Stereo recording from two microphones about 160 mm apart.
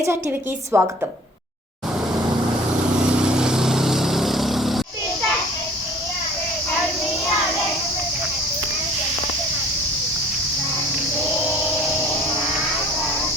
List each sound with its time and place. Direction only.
0.7 s a woman's voice: 15° right (ahead or behind)
3.2 s vehicle: 5° right (ahead or behind)